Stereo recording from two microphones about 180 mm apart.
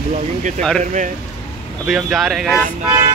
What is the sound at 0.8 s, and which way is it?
Speech, 45° right (ahead or behind).